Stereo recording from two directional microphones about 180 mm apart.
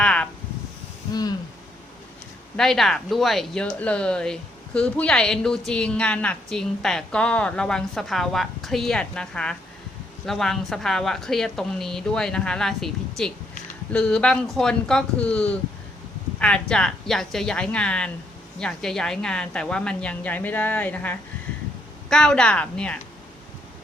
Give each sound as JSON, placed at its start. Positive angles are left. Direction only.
{"t": 0.0, "sound": "a sound", "side_deg": 5}
{"t": 1.1, "sound": "speech", "side_deg": 20}
{"t": 2.6, "sound": "a woman's voice", "side_deg": 0}